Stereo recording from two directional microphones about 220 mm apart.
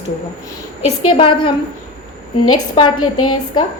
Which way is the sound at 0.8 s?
25° left (ahead or behind).